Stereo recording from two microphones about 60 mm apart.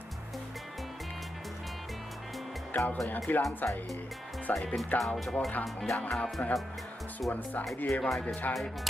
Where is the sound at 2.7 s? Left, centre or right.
Left.